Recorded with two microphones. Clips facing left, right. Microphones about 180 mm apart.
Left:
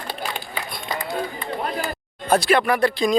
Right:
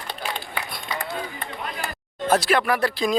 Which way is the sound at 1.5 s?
40° left (ahead or behind).